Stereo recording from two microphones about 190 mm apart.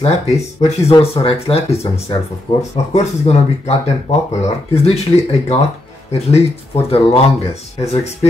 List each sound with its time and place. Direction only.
0.6 s speech: 35° left (ahead or behind)
2.5 s speech: 20° left (ahead or behind)
2.9 s speech: 35° left (ahead or behind)